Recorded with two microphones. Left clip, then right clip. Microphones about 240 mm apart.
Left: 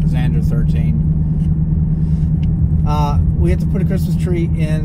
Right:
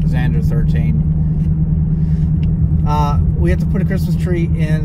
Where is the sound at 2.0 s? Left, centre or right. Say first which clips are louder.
Right 1 dB; centre.